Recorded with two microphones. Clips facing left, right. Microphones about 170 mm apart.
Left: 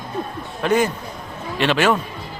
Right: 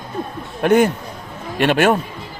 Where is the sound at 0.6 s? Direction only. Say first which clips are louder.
Right 5 dB; 60° right (ahead or behind).